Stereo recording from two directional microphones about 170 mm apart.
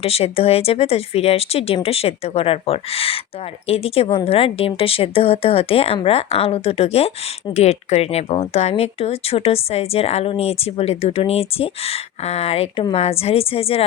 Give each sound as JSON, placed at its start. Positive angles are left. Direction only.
{"t": 0.0, "sound": "speech", "side_deg": 35}